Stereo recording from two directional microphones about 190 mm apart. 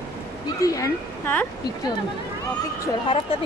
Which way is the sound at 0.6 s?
15° left (ahead or behind).